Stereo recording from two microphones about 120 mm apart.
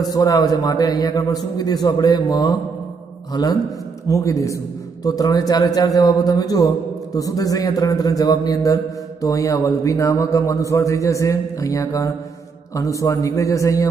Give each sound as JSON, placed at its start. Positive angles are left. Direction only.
{"t": 0.1, "sound": "a man's voice", "side_deg": 30}